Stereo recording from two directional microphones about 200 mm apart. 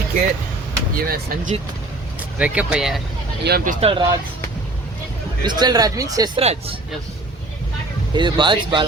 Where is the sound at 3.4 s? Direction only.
50° right (ahead or behind).